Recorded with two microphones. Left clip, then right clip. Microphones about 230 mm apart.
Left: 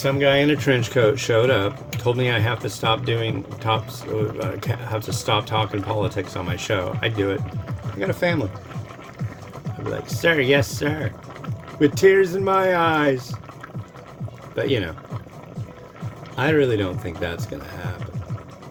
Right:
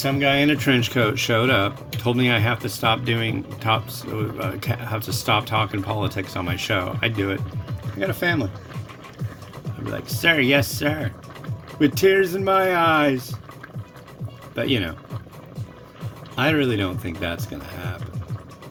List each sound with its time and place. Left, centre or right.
0.0 s speech: right
10.2 s speech: right
14.5 s speech: right
16.3 s speech: right